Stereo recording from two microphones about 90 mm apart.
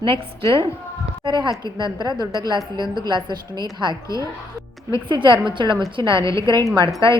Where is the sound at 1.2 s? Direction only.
60° right (ahead or behind).